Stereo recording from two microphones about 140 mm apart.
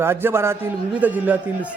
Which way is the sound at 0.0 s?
15° right (ahead or behind).